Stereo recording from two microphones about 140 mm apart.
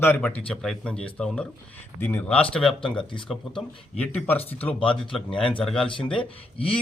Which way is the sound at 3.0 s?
35° left (ahead or behind).